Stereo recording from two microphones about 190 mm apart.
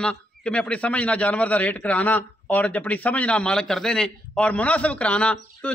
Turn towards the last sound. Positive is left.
turn(degrees=5)  # may be behind; listen again after turning